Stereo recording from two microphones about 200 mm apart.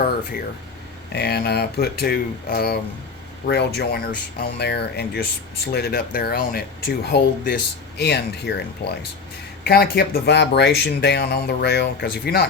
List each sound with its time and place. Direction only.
1.1 s speech: 55° left (ahead or behind)